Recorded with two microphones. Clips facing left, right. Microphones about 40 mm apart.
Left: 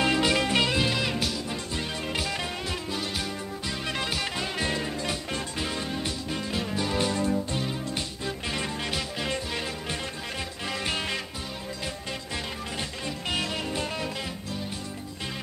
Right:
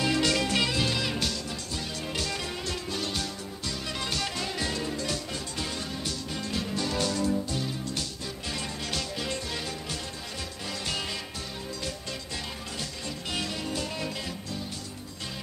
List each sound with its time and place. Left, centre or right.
0.0 s music: left
1.5 s music: left; by 3.3 s centre
3.6 s music: left
4.6 s music: left
8.9 s music: left
13.3 s music: left